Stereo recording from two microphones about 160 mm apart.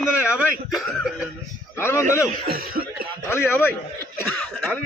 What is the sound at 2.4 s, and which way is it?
Cough, 70° right (ahead or behind).